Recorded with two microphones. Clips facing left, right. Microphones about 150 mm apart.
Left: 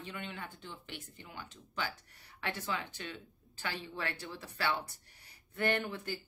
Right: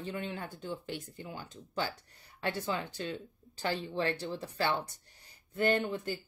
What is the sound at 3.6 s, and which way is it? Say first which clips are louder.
Speech: right 7 dB; 30° right (ahead or behind).